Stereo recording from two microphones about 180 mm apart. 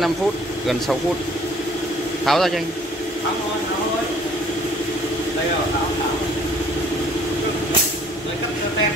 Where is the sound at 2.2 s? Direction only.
Centre (ahead or behind).